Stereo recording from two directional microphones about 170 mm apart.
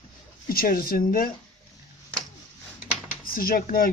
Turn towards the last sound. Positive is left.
turn(degrees=60)  # may be behind; listen again after turning